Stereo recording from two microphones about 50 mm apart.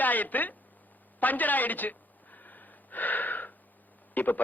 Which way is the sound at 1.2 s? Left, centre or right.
Left.